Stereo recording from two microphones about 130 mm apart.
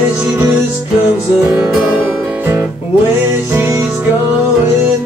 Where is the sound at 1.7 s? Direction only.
10° right (ahead or behind).